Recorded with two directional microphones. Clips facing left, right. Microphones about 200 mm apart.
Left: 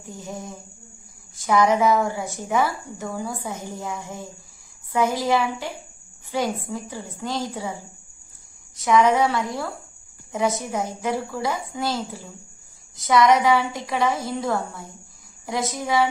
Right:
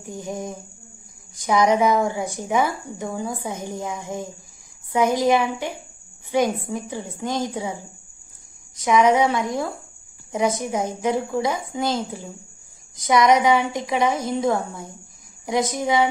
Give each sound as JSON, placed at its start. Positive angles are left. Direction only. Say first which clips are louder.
{"t": 0.0, "sound": "a woman's voice", "louder": "right 5 dB", "side_deg": -15}
{"t": 8.7, "sound": "a woman's voice", "louder": "right 1 dB", "side_deg": -15}